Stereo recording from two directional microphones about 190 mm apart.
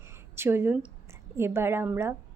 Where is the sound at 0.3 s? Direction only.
10° right (ahead or behind).